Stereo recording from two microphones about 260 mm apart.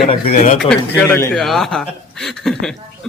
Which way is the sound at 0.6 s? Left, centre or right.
Centre.